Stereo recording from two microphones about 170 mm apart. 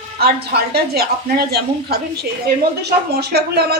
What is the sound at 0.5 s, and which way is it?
A woman's voice, 70° right (ahead or behind).